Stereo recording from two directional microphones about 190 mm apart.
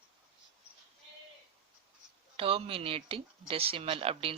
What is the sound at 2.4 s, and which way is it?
Speech, 30° right (ahead or behind).